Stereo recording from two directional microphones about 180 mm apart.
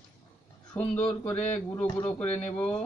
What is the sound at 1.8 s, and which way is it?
Speech, 35° left (ahead or behind).